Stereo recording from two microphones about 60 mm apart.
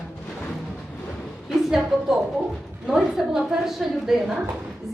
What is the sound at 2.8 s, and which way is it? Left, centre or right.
A woman's voice, centre.